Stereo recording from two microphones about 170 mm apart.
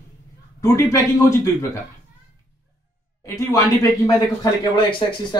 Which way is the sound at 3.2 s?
20° left (ahead or behind).